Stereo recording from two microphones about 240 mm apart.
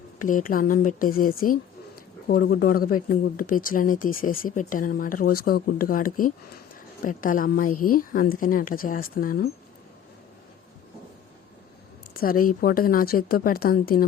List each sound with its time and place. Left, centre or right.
0.2 s speech: left
12.1 s speech: left